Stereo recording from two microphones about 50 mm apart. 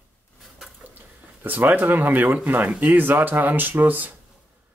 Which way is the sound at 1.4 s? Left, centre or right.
Right.